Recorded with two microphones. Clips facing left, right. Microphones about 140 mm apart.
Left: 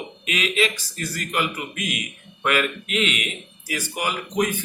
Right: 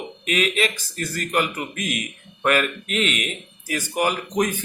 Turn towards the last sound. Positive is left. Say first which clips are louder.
# right 1 dB
turn(degrees=-45)  # may be behind; listen again after turning